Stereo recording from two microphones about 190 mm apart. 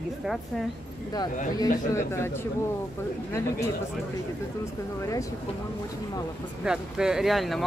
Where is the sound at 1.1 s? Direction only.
20° left (ahead or behind).